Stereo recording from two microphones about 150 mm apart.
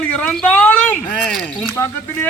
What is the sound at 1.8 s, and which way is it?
Speech, 15° left (ahead or behind).